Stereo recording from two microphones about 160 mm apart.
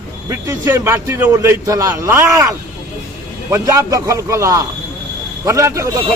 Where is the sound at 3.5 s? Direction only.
20° right (ahead or behind).